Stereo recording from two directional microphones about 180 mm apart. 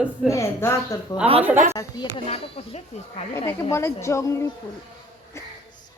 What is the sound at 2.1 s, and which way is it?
Speech, 30° left (ahead or behind).